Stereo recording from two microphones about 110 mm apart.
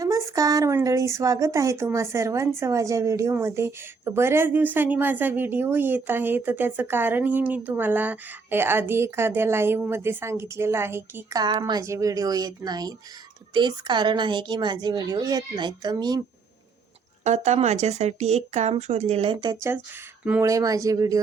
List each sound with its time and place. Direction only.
0.0 s a woman's voice: 30° right (ahead or behind)
11.6 s a woman's voice: 35° right (ahead or behind)
17.2 s speech: 90° right; by 19.4 s 65° right (ahead or behind)
20.4 s a woman's voice: 30° right (ahead or behind)